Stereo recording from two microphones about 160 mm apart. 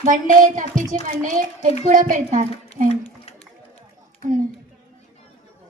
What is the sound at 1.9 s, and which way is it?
Speech, 55° right (ahead or behind).